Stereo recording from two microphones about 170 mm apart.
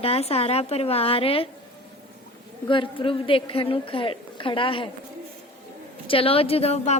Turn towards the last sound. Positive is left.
turn(degrees=35)  # may be behind; listen again after turning